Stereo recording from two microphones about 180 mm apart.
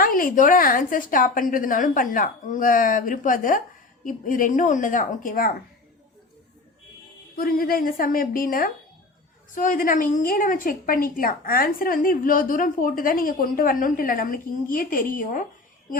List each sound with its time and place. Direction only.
0.0 s a woman's voice: 50° left (ahead or behind)
7.3 s a woman's voice: 55° left (ahead or behind)